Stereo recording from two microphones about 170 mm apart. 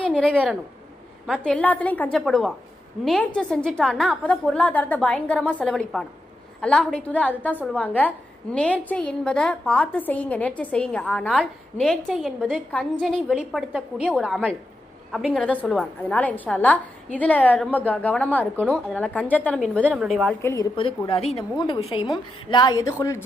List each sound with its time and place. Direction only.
1.5 s a woman's voice: 10° left (ahead or behind)
20.4 s a woman's voice: 15° left (ahead or behind)
20.7 s a woman's voice: 30° left (ahead or behind)